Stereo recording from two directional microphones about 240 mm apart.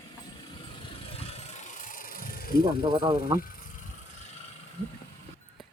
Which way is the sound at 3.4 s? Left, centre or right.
Left.